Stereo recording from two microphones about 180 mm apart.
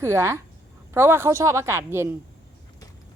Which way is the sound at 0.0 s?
15° right (ahead or behind).